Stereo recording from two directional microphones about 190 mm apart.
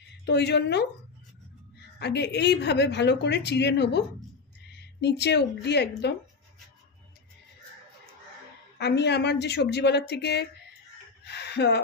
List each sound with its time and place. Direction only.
0.3 s a woman's voice: 60° left (ahead or behind)
2.0 s a woman's voice: 60° left (ahead or behind)
8.8 s a woman's voice: 60° left (ahead or behind)